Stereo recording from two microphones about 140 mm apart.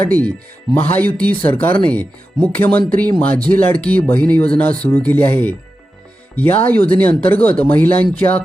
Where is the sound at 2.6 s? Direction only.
10° left (ahead or behind).